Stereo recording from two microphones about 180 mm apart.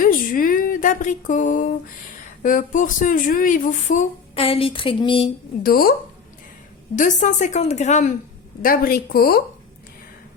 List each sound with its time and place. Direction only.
0.0 s speech: 50° left (ahead or behind); by 5.3 s 30° left (ahead or behind)
5.6 s speech: 55° left (ahead or behind)
6.9 s speech: 45° left (ahead or behind)
8.6 s speech: 55° left (ahead or behind)